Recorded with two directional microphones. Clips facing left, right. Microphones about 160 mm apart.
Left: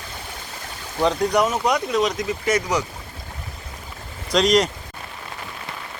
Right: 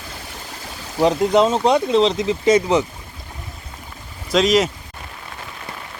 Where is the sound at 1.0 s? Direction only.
20° right (ahead or behind).